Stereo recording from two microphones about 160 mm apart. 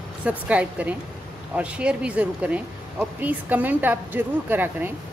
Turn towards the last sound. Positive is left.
turn(degrees=-10)  # may be behind; listen again after turning